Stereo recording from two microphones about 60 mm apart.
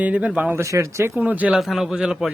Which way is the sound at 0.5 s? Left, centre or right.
Right.